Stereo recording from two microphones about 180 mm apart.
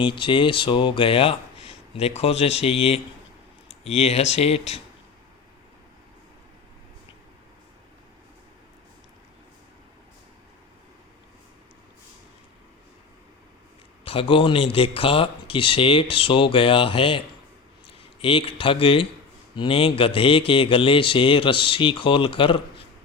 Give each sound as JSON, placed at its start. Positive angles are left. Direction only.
{"t": 0.0, "sound": "speech", "side_deg": 25}
{"t": 14.0, "sound": "speech", "side_deg": 30}